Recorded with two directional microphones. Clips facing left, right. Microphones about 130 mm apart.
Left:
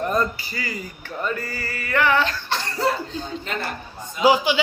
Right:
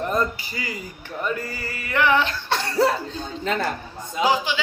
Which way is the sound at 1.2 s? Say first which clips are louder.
Even; 20° right (ahead or behind).